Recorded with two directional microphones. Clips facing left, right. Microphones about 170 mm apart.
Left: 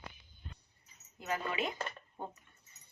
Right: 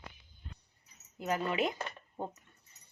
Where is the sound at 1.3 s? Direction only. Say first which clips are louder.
Right 4 dB; 40° right (ahead or behind).